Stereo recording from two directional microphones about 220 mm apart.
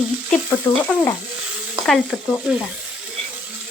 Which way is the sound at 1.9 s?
Centre (ahead or behind).